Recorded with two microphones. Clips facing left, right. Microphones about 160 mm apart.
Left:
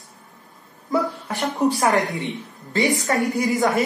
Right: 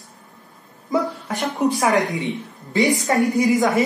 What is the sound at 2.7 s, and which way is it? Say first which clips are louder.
Speech: right 2 dB; 20° right (ahead or behind).